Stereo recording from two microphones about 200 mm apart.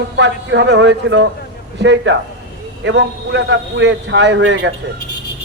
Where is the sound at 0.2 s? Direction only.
60° right (ahead or behind).